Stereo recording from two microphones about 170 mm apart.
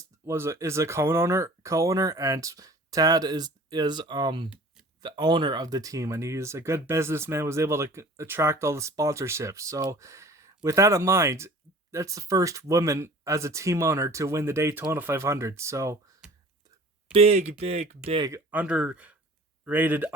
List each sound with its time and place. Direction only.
0.3 s speech: 15° right (ahead or behind)
17.1 s speech: 35° right (ahead or behind)
18.2 s speech: 15° right (ahead or behind)